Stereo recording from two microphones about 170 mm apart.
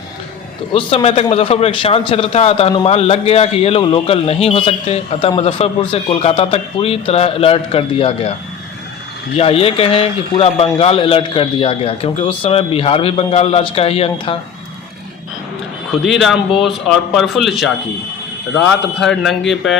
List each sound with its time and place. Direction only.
0.7 s a man's voice: 35° left (ahead or behind)
9.3 s a man's voice: 35° left (ahead or behind)
16.0 s a man's voice: centre (ahead or behind)